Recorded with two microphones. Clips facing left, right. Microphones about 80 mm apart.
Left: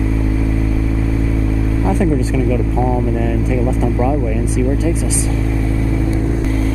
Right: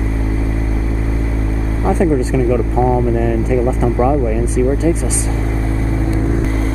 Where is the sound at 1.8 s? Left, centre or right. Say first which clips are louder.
Right 3 dB; right.